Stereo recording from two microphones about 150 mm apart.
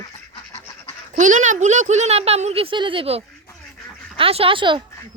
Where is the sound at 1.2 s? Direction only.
55° right (ahead or behind); by 4.8 s 35° right (ahead or behind).